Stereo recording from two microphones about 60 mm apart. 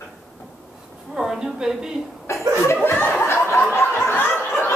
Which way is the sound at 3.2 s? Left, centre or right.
Left.